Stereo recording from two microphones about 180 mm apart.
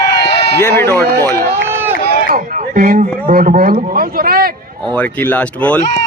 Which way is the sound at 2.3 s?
50° right (ahead or behind).